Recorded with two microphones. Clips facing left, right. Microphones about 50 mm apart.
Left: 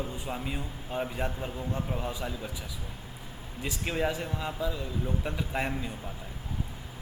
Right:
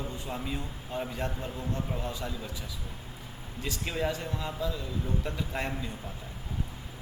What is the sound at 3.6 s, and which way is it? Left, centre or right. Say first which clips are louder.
A man's voice: left 2 dB; centre.